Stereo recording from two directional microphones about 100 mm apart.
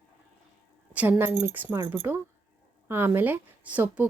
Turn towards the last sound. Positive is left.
turn(degrees=-15)  # may be behind; listen again after turning